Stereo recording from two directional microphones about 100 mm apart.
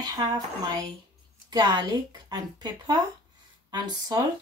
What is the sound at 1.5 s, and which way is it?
A woman's voice, 45° right (ahead or behind).